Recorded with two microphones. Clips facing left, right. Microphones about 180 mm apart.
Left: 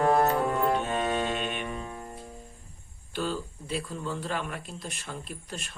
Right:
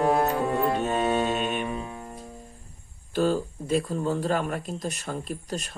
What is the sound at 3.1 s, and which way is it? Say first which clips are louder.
Speech: right 8 dB; 45° right (ahead or behind).